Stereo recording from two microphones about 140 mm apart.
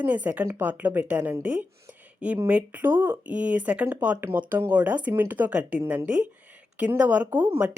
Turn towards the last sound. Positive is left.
turn(degrees=-10)  # may be behind; listen again after turning